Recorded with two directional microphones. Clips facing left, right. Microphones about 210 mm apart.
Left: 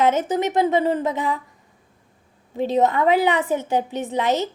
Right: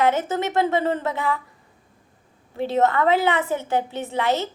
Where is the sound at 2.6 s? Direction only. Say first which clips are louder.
Left 1 dB; 15° left (ahead or behind).